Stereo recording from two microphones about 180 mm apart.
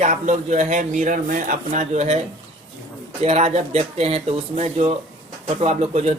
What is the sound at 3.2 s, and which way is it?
A man's voice, 35° right (ahead or behind).